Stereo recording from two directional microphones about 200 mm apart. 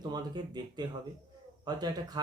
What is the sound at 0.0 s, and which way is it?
Speech, 20° right (ahead or behind).